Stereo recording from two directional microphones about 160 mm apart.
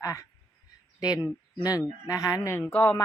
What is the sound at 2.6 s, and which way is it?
Speech, 10° left (ahead or behind).